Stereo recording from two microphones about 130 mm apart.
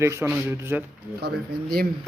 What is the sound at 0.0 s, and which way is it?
Speech, 20° right (ahead or behind).